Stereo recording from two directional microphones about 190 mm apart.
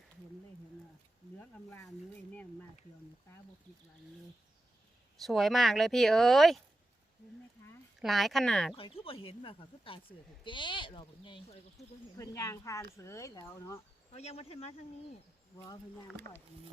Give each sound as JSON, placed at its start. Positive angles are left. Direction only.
{"t": 5.2, "sound": "speech", "side_deg": 0}
{"t": 8.0, "sound": "speech", "side_deg": 0}
{"t": 8.7, "sound": "speech", "side_deg": 30}
{"t": 11.8, "sound": "speech", "side_deg": 0}
{"t": 12.1, "sound": "speech", "side_deg": 15}
{"t": 14.1, "sound": "speech", "side_deg": 35}
{"t": 15.5, "sound": "speech", "side_deg": 20}